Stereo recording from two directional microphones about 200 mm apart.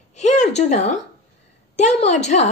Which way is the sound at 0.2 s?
35° left (ahead or behind).